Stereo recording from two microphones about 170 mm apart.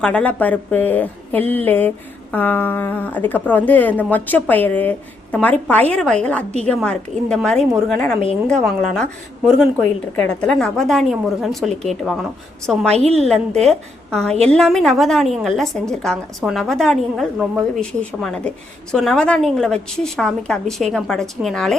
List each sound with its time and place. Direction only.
0.0 s a woman's voice: 5° left (ahead or behind)
10.2 s a woman's voice: 5° left (ahead or behind)
12.9 s a woman's voice: 40° right (ahead or behind)
13.7 s a woman's voice: 5° left (ahead or behind)